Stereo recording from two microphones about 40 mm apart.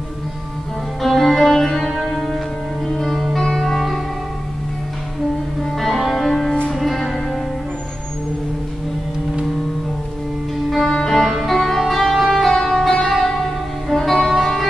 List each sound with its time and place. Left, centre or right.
1.0 s music: centre
5.6 s music: centre
10.9 s music: centre